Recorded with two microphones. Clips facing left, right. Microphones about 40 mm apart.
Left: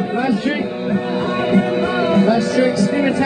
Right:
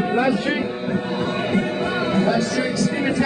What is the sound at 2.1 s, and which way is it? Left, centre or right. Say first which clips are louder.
Speech: left 5 dB; centre.